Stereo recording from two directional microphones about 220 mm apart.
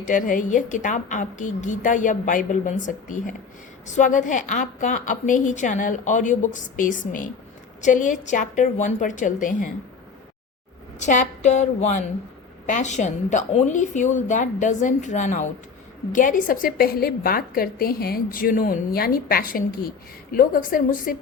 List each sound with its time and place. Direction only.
0.0 s a woman's voice: 35° left (ahead or behind)
11.0 s a woman's voice: 35° left (ahead or behind)